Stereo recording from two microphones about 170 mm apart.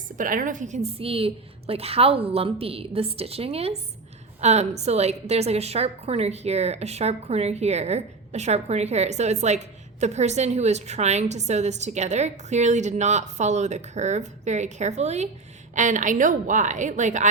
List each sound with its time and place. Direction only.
0.2 s a woman's voice: 50° right (ahead or behind)